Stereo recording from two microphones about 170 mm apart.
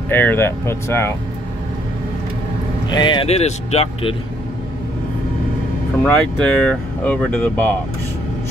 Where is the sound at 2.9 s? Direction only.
25° left (ahead or behind).